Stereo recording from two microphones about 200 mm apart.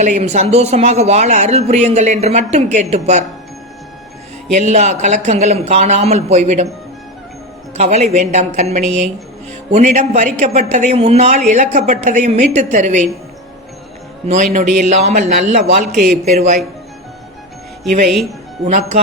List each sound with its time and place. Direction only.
0.0 s speech: 35° right (ahead or behind)
4.5 s speech: 35° right (ahead or behind)
7.8 s speech: 35° right (ahead or behind)
14.3 s speech: 35° right (ahead or behind)
15.9 s a man's voice: centre (ahead or behind)
16.2 s speech: 35° right (ahead or behind)
18.0 s a man's voice: centre (ahead or behind)
18.6 s speech: 35° right (ahead or behind)